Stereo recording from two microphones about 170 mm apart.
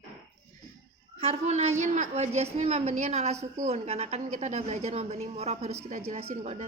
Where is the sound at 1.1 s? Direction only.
40° right (ahead or behind).